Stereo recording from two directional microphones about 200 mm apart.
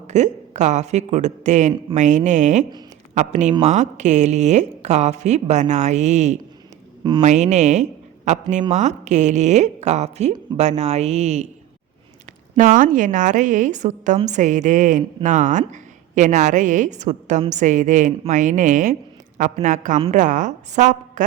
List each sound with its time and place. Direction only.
0.1 s a woman's voice: 35° right (ahead or behind)
7.0 s speech: 25° right (ahead or behind)
7.3 s a woman's voice: 35° right (ahead or behind)
12.5 s a woman's voice: 40° right (ahead or behind)